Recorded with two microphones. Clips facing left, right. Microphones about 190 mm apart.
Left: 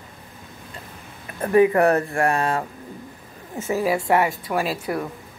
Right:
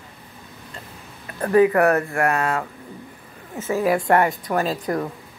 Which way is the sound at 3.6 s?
15° left (ahead or behind).